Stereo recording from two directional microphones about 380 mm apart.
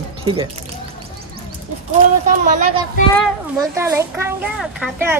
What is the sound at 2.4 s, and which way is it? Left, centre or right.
Speech, centre.